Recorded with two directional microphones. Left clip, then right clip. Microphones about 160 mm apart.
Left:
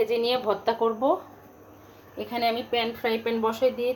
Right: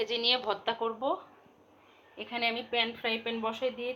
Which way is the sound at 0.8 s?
10° right (ahead or behind).